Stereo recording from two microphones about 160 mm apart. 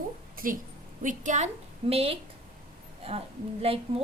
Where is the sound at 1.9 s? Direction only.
40° right (ahead or behind).